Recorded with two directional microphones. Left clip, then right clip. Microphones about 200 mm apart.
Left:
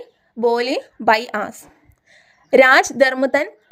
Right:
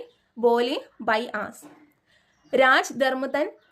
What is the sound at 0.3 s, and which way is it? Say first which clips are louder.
A woman's voice: left 3 dB; 30° left (ahead or behind).